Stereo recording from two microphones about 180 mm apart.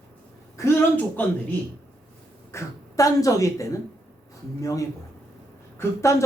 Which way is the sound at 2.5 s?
15° left (ahead or behind).